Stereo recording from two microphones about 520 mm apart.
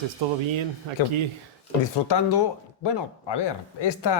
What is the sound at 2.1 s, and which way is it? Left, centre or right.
Speech, left.